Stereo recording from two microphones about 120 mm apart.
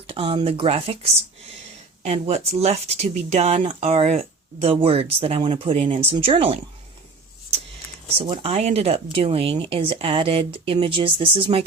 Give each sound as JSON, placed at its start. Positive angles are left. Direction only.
{"t": 0.1, "sound": "speech", "side_deg": -45}
{"t": 3.6, "sound": "speech", "side_deg": -55}
{"t": 8.2, "sound": "speech", "side_deg": -55}